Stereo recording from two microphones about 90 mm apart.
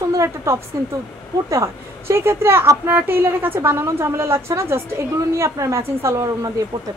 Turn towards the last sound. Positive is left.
turn(degrees=-35)  # may be behind; listen again after turning